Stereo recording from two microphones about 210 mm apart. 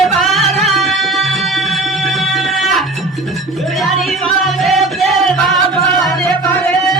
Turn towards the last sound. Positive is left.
turn(degrees=0)  # may be behind; listen again after turning